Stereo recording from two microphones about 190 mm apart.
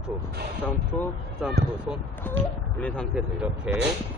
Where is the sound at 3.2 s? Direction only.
5° right (ahead or behind).